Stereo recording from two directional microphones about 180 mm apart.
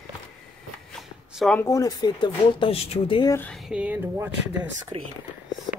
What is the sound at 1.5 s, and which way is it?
Speech, 15° left (ahead or behind).